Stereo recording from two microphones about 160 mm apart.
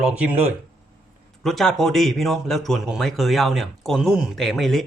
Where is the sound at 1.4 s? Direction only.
Centre (ahead or behind).